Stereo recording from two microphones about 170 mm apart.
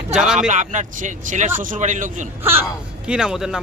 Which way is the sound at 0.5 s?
45° right (ahead or behind).